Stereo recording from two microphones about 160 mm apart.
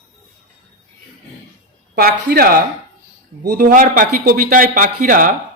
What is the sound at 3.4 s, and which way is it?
A man's voice, 55° right (ahead or behind).